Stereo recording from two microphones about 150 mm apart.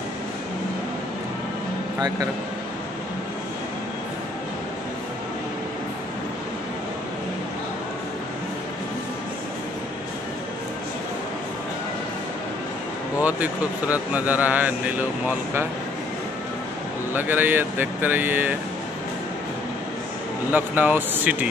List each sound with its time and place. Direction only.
2.0 s speech: 25° right (ahead or behind)
13.2 s speech: 10° right (ahead or behind)
17.1 s speech: 15° right (ahead or behind)
20.5 s speech: 10° right (ahead or behind)